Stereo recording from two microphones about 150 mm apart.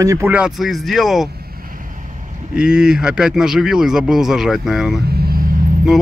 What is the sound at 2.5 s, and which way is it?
Speech, 5° right (ahead or behind).